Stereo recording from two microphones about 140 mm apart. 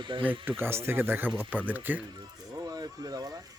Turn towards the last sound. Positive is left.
turn(degrees=-25)  # may be behind; listen again after turning